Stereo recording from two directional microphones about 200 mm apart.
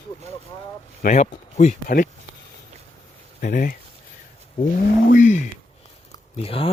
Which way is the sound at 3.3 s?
40° left (ahead or behind).